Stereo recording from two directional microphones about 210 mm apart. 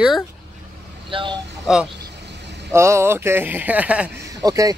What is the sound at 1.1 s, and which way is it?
Speech, 25° right (ahead or behind).